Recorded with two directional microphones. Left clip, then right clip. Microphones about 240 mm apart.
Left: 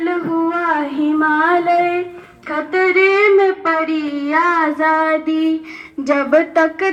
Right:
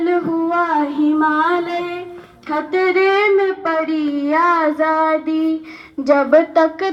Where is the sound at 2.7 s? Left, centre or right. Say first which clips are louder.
Left 2 dB; right.